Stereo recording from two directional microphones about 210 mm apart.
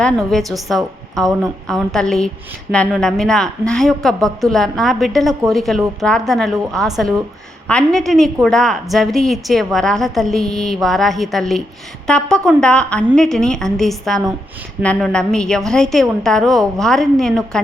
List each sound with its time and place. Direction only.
0.0 s a woman's voice: centre (ahead or behind)